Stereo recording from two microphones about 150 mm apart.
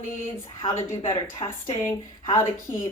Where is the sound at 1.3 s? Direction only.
25° left (ahead or behind).